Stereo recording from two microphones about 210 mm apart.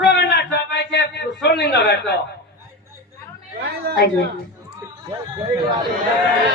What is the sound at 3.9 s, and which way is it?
Speech, 50° right (ahead or behind).